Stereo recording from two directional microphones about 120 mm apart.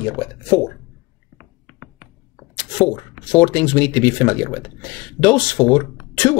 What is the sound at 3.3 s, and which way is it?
Speech, 20° left (ahead or behind).